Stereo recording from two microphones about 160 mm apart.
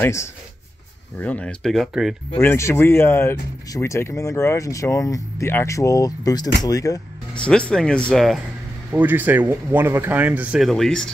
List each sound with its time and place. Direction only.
0.0 s speech: 15° left (ahead or behind); by 2.4 s centre (ahead or behind)
2.4 s speech: 15° left (ahead or behind)
7.3 s speech: 5° left (ahead or behind)
8.9 s speech: 10° right (ahead or behind); by 11.1 s 5° left (ahead or behind)